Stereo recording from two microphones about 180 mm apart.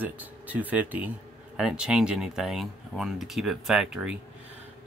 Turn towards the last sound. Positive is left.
turn(degrees=-5)  # may be behind; listen again after turning